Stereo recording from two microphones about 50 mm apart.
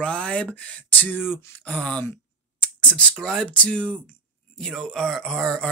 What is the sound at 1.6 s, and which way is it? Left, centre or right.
Speech, left.